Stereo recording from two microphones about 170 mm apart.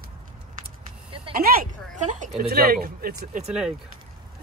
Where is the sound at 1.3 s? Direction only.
60° right (ahead or behind).